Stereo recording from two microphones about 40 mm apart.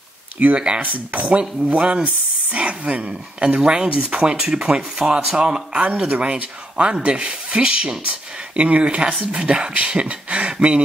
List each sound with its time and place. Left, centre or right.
0.4 s speech: right